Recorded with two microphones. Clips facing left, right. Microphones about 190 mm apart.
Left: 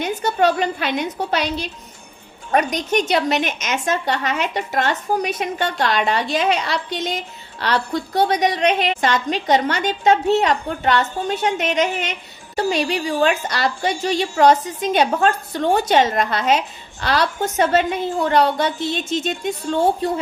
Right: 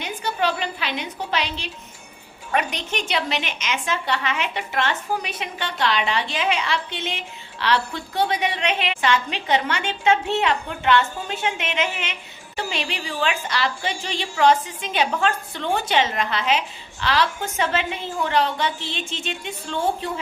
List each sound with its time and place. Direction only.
0.0 s a woman's voice: 45° left (ahead or behind)